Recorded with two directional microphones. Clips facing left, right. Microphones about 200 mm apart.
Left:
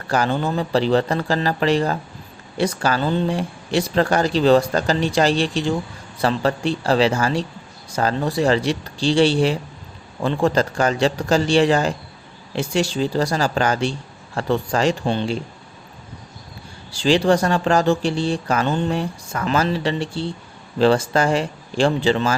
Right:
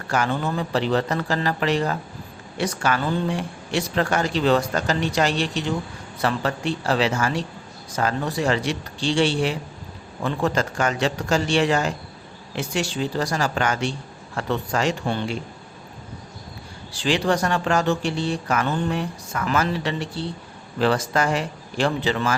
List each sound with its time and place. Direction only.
0.1 s a man's voice: 35° left (ahead or behind)
16.9 s a man's voice: 30° left (ahead or behind)